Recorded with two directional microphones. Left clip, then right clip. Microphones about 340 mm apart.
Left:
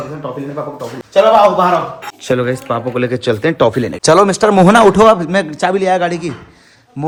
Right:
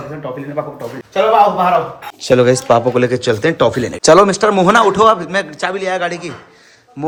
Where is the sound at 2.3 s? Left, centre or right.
Centre.